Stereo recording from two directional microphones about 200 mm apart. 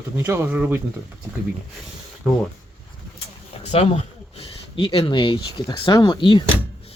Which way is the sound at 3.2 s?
30° left (ahead or behind).